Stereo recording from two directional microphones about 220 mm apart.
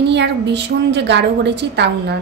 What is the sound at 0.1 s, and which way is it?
A woman's voice, 50° right (ahead or behind).